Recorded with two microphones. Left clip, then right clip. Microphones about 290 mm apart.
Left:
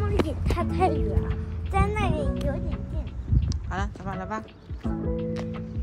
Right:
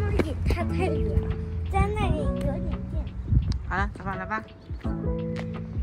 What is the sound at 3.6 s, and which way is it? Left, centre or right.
Speech, centre.